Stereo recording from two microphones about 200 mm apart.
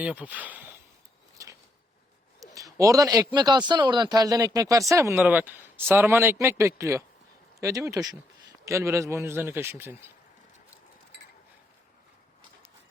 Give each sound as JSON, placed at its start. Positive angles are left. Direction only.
{"t": 0.0, "sound": "speech", "side_deg": -10}
{"t": 1.4, "sound": "a sound", "side_deg": -15}
{"t": 2.6, "sound": "a man's voice", "side_deg": -15}